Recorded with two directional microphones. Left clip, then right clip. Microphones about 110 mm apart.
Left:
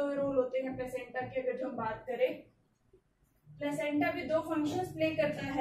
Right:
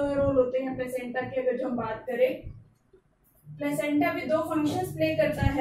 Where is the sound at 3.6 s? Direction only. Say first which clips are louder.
Right 6 dB; 20° right (ahead or behind).